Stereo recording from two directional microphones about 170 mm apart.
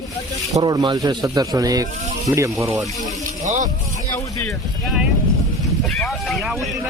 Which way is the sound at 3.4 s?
45° right (ahead or behind).